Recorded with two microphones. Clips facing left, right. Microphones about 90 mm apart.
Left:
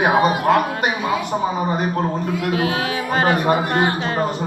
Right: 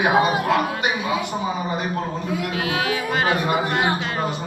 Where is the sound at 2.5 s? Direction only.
35° left (ahead or behind).